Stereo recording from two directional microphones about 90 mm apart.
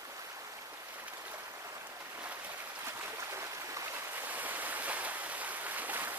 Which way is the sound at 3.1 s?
30° right (ahead or behind).